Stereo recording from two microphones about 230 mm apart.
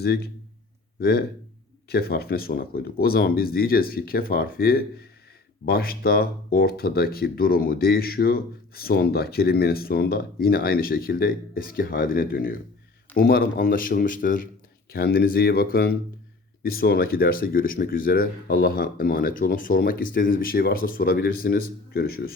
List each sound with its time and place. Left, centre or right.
0.0 s speech: left